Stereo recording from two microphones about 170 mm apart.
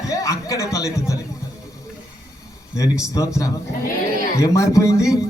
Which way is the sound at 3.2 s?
20° left (ahead or behind).